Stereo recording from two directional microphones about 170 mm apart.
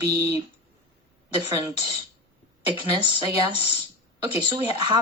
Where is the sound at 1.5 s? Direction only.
20° right (ahead or behind).